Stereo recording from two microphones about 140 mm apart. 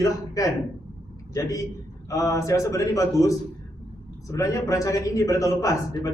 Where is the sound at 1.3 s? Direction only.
25° left (ahead or behind).